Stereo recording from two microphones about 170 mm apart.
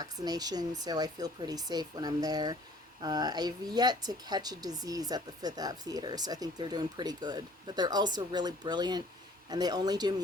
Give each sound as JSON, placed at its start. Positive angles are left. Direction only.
{"t": 0.0, "sound": "speech", "side_deg": -25}